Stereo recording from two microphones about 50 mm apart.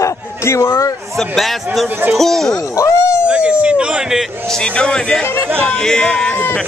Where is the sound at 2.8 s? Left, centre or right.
Left.